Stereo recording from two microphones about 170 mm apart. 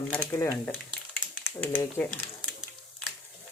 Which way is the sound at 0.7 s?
5° right (ahead or behind).